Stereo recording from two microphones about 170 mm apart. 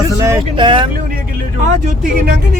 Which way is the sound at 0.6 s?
30° right (ahead or behind).